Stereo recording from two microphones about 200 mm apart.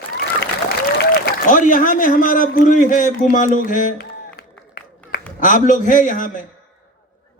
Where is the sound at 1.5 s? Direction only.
40° left (ahead or behind).